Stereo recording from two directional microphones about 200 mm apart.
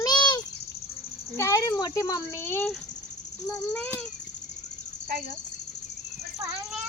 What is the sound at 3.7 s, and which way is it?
Speech, 10° left (ahead or behind).